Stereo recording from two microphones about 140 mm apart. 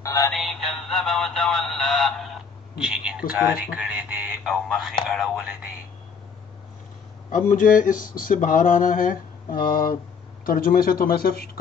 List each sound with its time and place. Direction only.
0.0 s synthetic singing: 20° left (ahead or behind)
0.3 s music: centre (ahead or behind)
2.8 s speech: 5° right (ahead or behind)
7.2 s a sound: 70° left (ahead or behind); by 9.9 s 90° left
10.4 s a man's voice: 90° left